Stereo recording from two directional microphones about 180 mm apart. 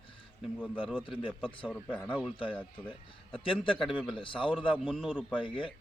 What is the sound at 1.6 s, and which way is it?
Speech, 5° left (ahead or behind).